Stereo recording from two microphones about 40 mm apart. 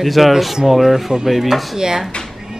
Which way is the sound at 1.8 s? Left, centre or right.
Centre.